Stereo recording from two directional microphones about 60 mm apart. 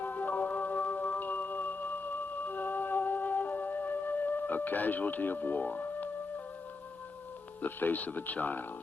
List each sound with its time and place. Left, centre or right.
0.0 s music: left
7.6 s speech: left